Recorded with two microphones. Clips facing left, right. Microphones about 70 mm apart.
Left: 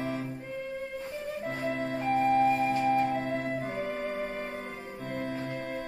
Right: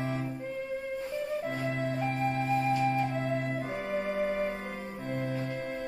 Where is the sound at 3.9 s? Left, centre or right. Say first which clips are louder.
Right 4 dB; centre.